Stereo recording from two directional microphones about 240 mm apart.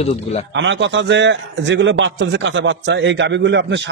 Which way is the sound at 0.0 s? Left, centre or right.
Left.